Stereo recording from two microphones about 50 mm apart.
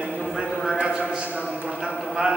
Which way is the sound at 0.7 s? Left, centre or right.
Right.